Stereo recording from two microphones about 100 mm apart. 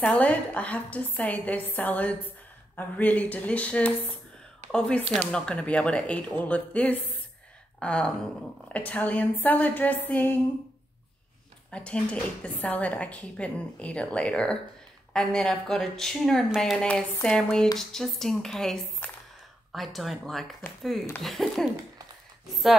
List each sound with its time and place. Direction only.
0.0 s a woman's voice: 10° left (ahead or behind)
11.7 s a woman's voice: 10° left (ahead or behind)
19.0 s a sound: 15° left (ahead or behind)
19.7 s speech: centre (ahead or behind)